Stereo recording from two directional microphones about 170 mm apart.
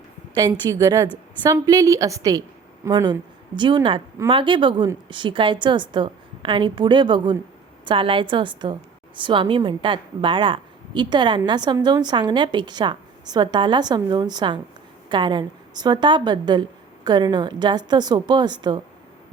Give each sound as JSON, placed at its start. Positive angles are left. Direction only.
{"t": 0.3, "sound": "a woman's voice", "side_deg": -25}